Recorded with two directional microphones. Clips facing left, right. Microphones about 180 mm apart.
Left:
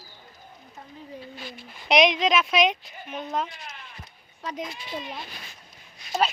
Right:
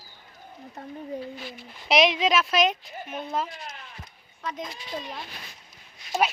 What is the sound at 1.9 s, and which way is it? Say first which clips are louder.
Speech: left 1 dB; 5° right (ahead or behind).